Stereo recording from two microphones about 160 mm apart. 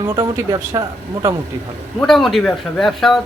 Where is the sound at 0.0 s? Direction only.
25° right (ahead or behind).